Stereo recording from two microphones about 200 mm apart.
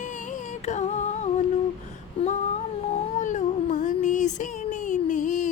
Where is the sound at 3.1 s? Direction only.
40° left (ahead or behind).